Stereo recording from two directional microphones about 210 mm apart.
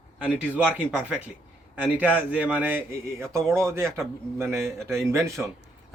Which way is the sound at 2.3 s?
5° right (ahead or behind).